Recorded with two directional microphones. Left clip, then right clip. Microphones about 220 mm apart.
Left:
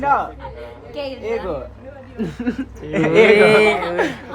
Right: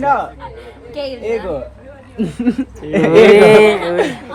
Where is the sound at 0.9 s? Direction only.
20° right (ahead or behind).